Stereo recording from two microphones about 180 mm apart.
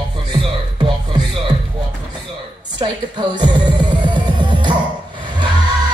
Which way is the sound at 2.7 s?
25° right (ahead or behind).